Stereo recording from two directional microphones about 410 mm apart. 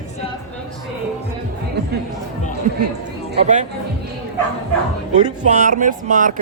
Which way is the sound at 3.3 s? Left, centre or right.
Centre.